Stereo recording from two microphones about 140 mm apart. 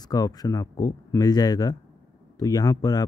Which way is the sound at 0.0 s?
25° left (ahead or behind).